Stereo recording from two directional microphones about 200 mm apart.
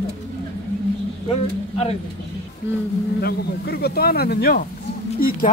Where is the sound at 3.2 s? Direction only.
50° left (ahead or behind).